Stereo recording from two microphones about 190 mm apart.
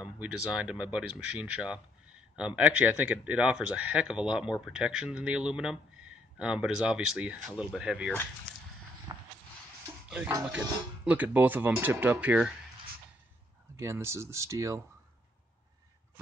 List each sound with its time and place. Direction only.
0.0 s speech: 5° right (ahead or behind)
9.1 s a sound: 20° right (ahead or behind)
10.0 s speech: 10° right (ahead or behind)
13.7 s speech: 15° right (ahead or behind)